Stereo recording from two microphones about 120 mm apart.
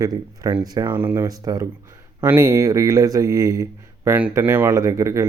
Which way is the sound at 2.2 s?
20° right (ahead or behind).